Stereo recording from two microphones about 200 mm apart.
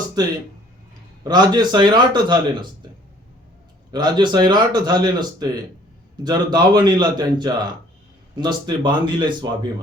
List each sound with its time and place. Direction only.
0.2 s a man's voice: 20° right (ahead or behind)
3.9 s a man's voice: 20° right (ahead or behind)